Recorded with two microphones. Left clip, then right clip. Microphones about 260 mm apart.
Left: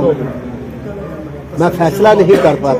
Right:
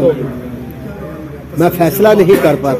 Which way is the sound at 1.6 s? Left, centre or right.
Right.